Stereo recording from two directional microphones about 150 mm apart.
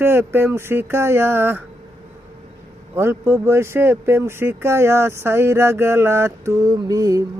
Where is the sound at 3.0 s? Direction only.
15° right (ahead or behind).